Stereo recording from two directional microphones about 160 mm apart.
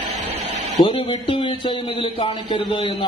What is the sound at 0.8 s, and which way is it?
A man's voice, 30° left (ahead or behind).